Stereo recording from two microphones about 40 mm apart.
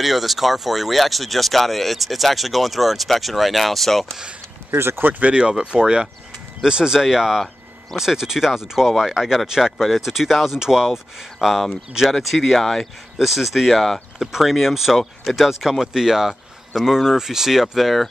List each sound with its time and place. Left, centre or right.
0.0 s speech: centre
4.6 s speech: right
5.2 s speech: right; by 12.8 s centre
13.2 s speech: centre
13.7 s speech: centre
14.2 s speech: centre
15.8 s speech: centre